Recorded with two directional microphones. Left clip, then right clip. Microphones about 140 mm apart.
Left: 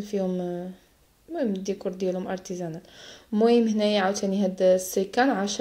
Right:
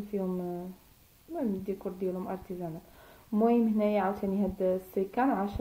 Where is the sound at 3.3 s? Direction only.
5° left (ahead or behind).